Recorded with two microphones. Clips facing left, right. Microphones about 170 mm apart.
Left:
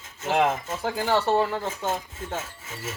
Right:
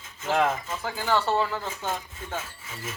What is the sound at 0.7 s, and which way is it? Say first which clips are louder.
Speech: left 2 dB; 50° left (ahead or behind).